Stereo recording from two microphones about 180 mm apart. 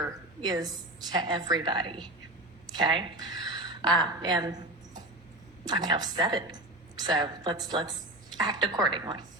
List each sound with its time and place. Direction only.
0.0 s a woman's voice: 20° right (ahead or behind)